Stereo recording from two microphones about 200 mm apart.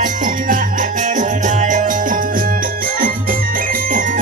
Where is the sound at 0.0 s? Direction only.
45° right (ahead or behind).